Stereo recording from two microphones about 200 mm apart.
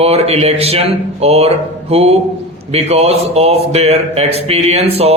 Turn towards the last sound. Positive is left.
turn(degrees=-30)  # may be behind; listen again after turning